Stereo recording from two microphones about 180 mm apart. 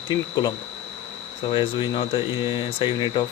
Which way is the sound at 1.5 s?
30° left (ahead or behind).